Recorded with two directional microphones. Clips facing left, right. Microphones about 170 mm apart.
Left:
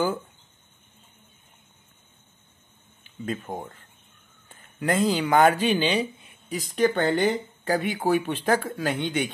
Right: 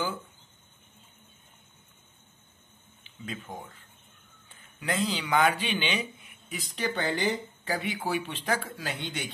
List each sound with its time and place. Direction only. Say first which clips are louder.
3.0 s a man's voice: left 8 dB; 45° left (ahead or behind)